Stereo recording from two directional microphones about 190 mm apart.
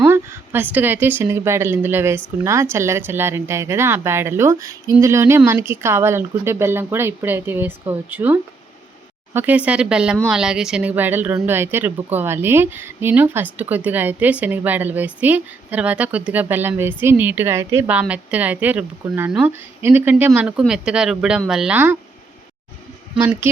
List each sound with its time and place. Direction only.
0.0 s speech: 10° right (ahead or behind)